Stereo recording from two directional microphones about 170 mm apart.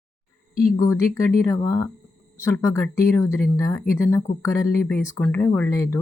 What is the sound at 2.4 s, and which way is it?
Speech, 15° left (ahead or behind).